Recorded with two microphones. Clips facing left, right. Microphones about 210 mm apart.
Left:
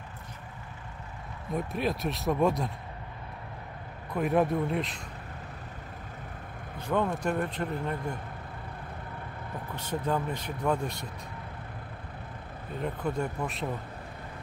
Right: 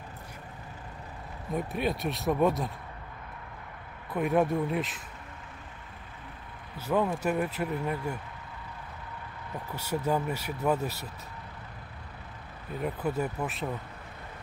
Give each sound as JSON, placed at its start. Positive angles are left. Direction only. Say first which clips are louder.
{"t": 1.5, "sound": "speech", "louder": "even", "side_deg": 0}
{"t": 4.1, "sound": "speech", "louder": "even", "side_deg": 0}
{"t": 6.8, "sound": "speech", "louder": "right 1 dB", "side_deg": -5}
{"t": 9.8, "sound": "speech", "louder": "right 1 dB", "side_deg": -10}
{"t": 12.8, "sound": "speech", "louder": "right 1 dB", "side_deg": -5}